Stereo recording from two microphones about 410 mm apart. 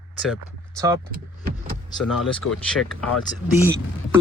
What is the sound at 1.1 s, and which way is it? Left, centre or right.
Vehicle, right.